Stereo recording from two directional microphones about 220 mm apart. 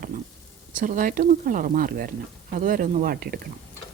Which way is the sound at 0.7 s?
40° right (ahead or behind).